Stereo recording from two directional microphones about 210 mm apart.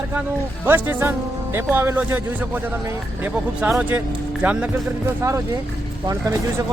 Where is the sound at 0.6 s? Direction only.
10° right (ahead or behind).